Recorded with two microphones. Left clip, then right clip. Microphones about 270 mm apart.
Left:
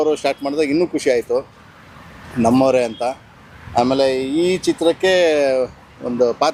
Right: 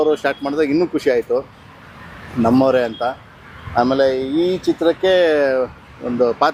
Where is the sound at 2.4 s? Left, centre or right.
Centre.